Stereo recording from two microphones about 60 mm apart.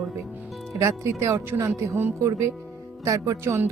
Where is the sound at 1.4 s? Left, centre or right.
Right.